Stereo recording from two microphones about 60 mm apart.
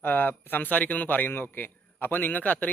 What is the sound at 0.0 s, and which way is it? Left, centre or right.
A man's voice, left.